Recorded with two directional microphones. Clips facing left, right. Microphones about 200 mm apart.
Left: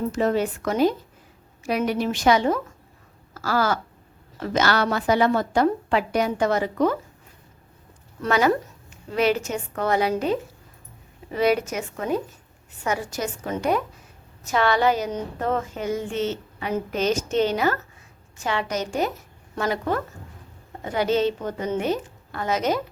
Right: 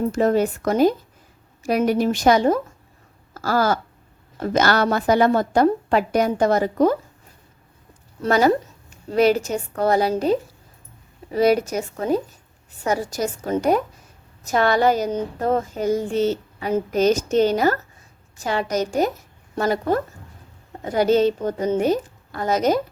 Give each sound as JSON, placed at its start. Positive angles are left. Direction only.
{"t": 0.1, "sound": "a woman's voice", "side_deg": -45}
{"t": 3.3, "sound": "a sound", "side_deg": -40}
{"t": 4.4, "sound": "a woman's voice", "side_deg": -40}
{"t": 8.2, "sound": "speech", "side_deg": -35}
{"t": 11.3, "sound": "speech", "side_deg": -40}